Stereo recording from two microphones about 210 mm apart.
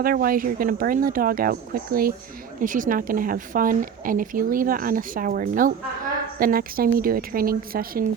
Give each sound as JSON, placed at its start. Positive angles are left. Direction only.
{"t": 0.0, "sound": "speech", "side_deg": -45}